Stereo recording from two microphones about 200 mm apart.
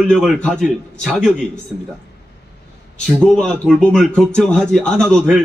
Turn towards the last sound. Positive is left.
turn(degrees=0)  # may be behind; listen again after turning